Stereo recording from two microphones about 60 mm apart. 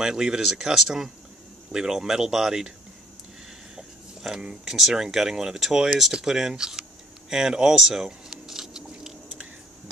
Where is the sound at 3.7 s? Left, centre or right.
Centre.